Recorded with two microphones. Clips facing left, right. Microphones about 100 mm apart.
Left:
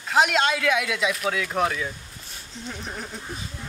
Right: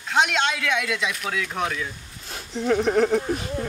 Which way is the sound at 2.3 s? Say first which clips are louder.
Right 15 dB; 65° right (ahead or behind).